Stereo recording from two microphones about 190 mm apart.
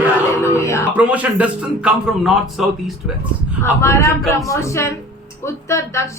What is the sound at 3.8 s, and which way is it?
A woman's voice, 15° left (ahead or behind).